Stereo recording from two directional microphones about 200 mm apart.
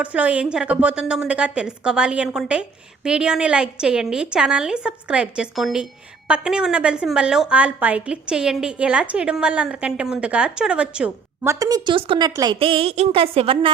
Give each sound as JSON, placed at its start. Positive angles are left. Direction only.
{"t": 0.0, "sound": "a woman's voice", "side_deg": -5}
{"t": 11.6, "sound": "a woman's voice", "side_deg": -20}